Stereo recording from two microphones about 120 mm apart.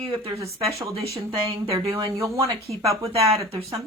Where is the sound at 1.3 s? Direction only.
55° right (ahead or behind).